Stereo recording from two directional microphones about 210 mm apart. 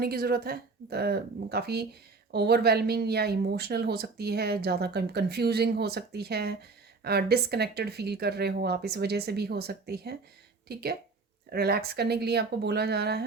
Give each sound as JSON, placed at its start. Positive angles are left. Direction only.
{"t": 0.0, "sound": "speech", "side_deg": -45}